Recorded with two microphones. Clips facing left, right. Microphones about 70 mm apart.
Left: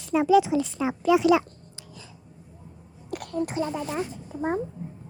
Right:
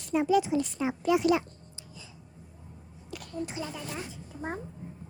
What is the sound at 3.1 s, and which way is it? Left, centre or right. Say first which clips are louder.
A child's voice: left 8 dB; left.